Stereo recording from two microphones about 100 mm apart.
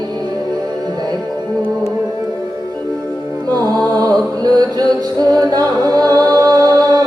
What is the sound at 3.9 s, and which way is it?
Music, 40° right (ahead or behind).